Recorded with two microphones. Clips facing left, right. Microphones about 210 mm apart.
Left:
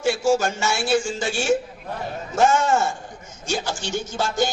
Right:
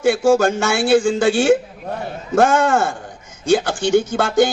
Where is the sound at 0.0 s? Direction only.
55° right (ahead or behind).